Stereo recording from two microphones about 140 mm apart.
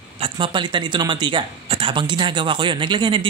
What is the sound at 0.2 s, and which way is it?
Speech, 35° right (ahead or behind).